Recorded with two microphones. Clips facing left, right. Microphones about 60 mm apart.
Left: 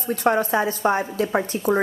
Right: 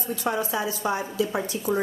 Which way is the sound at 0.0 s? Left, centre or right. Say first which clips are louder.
Left 7 dB; left.